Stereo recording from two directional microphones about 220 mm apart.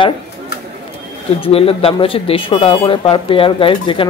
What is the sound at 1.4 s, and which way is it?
Speech, 25° left (ahead or behind).